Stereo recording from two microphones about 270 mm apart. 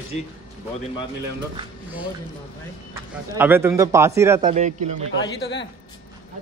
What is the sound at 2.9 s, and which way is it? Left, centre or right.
Speech, centre.